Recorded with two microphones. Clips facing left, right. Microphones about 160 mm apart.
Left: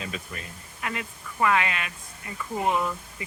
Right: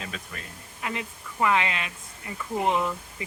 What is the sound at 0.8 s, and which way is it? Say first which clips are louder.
Speech: even; 20° right (ahead or behind).